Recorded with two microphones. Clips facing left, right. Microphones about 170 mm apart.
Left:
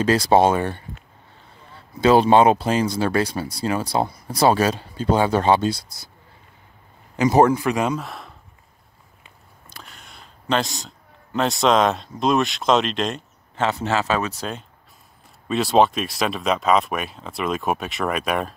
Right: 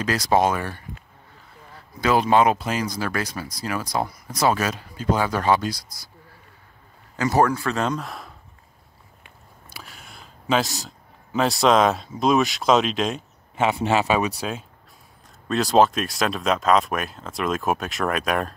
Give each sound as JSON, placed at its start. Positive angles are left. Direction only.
{"t": 0.0, "sound": "speech", "side_deg": 30}
{"t": 7.2, "sound": "a man's voice", "side_deg": 20}
{"t": 9.7, "sound": "a sound", "side_deg": -5}
{"t": 11.6, "sound": "speech", "side_deg": 0}
{"t": 13.6, "sound": "speech", "side_deg": -15}
{"t": 15.4, "sound": "speech", "side_deg": 0}